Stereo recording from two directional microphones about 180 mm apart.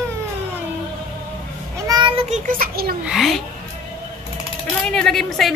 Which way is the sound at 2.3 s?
50° right (ahead or behind).